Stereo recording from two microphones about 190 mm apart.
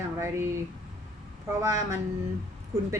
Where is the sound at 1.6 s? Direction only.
15° right (ahead or behind).